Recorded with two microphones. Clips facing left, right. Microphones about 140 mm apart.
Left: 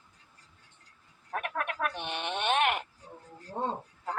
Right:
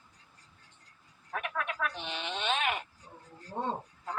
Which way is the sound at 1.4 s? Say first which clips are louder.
Left 2 dB; 50° left (ahead or behind).